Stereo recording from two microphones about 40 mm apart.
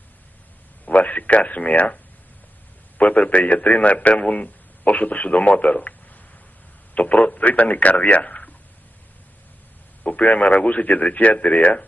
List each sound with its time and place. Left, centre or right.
0.8 s speech: left
3.0 s a man's voice: left
10.0 s a man's voice: left